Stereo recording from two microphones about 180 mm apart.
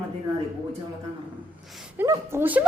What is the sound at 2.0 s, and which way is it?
Speech, 15° right (ahead or behind).